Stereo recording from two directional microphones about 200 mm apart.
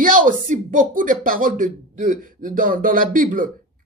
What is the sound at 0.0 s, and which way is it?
Speech, 45° right (ahead or behind).